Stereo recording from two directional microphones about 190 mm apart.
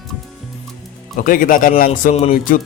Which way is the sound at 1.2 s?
45° left (ahead or behind).